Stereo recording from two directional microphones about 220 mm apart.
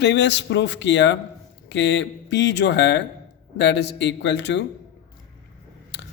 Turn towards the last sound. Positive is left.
turn(degrees=55)  # may be behind; listen again after turning